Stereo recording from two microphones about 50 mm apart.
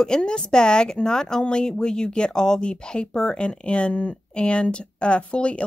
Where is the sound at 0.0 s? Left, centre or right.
Centre.